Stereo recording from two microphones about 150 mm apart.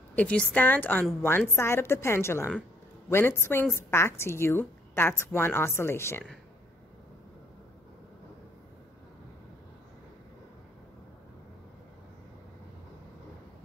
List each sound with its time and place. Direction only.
0.1 s a woman's voice: 10° left (ahead or behind)